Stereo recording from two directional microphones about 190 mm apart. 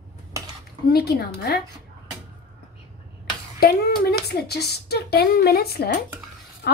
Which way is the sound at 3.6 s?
55° left (ahead or behind).